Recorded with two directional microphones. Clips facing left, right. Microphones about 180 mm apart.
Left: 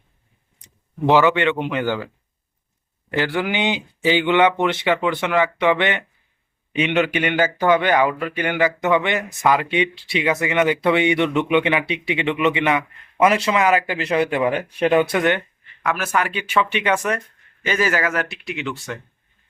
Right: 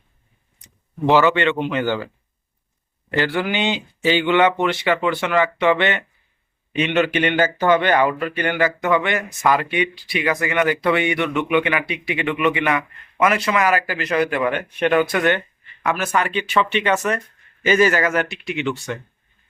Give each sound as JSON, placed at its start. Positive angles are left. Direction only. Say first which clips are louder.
{"t": 1.1, "sound": "speech", "louder": "even", "side_deg": 15}
{"t": 3.1, "sound": "speech", "louder": "right 1 dB", "side_deg": 10}
{"t": 15.1, "sound": "speech", "louder": "even", "side_deg": 15}
{"t": 15.4, "sound": "speech", "louder": "even", "side_deg": 0}